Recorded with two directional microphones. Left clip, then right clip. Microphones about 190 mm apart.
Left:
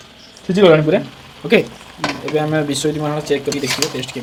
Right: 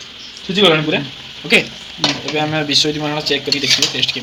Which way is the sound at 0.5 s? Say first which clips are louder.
Left 2 dB; 60° left (ahead or behind).